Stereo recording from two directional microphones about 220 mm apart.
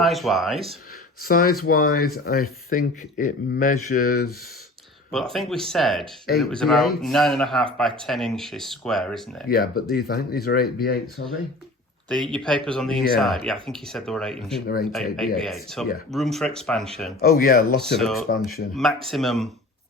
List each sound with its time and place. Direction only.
0.0 s a man's voice: centre (ahead or behind)
1.2 s speech: 45° left (ahead or behind)
5.1 s a man's voice: centre (ahead or behind)
9.5 s speech: 45° left (ahead or behind)
12.0 s a man's voice: 5° left (ahead or behind)
17.2 s speech: 45° left (ahead or behind)
17.7 s a man's voice: centre (ahead or behind)
18.3 s speech: 45° left (ahead or behind)
18.7 s a man's voice: centre (ahead or behind)